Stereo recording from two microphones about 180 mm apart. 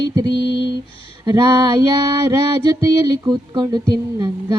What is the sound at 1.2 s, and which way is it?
Music, 20° right (ahead or behind).